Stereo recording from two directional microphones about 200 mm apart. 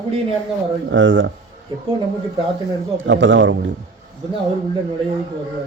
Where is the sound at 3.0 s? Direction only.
70° right (ahead or behind).